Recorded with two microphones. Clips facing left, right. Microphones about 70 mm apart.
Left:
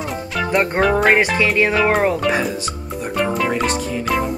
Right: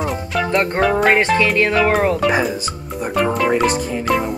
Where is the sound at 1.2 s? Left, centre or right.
Centre.